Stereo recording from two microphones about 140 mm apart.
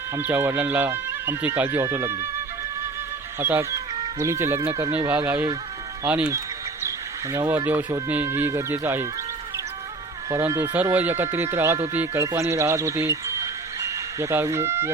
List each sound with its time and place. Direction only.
0.2 s speech: 15° right (ahead or behind)
3.4 s speech: 20° right (ahead or behind)
7.3 s speech: 20° right (ahead or behind)
10.2 s speech: 25° right (ahead or behind)